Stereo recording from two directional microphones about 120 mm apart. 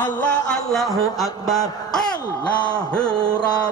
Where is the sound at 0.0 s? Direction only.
10° left (ahead or behind).